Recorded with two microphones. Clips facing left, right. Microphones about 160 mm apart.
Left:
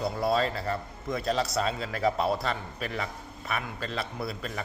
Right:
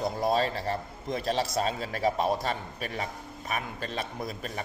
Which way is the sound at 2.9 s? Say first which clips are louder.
Even; 40° right (ahead or behind).